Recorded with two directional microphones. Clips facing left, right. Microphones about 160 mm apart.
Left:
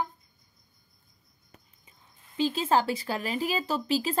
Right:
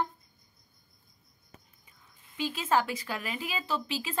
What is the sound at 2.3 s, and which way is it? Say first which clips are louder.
Speech: left 3 dB; 30° left (ahead or behind).